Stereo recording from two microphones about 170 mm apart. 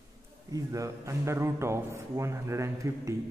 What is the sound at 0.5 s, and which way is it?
Speech, 20° right (ahead or behind).